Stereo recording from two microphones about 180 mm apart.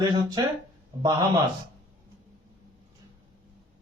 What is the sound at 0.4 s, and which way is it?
Speech, 20° right (ahead or behind).